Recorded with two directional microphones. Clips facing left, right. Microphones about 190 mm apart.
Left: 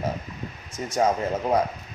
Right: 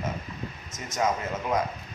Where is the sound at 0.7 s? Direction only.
35° left (ahead or behind).